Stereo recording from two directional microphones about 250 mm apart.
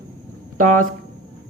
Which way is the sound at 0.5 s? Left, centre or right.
Right.